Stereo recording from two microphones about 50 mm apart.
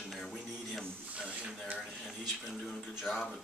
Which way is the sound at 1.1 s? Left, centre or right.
Right.